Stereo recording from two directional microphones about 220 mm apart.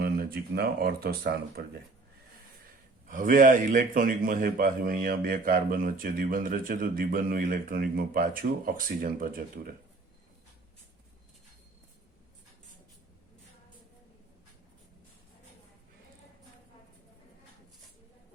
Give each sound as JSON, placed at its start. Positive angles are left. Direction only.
{"t": 0.0, "sound": "speech", "side_deg": -45}
{"t": 3.1, "sound": "a man's voice", "side_deg": -35}